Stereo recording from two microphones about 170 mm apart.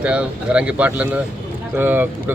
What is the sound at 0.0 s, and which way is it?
Speech, 5° right (ahead or behind).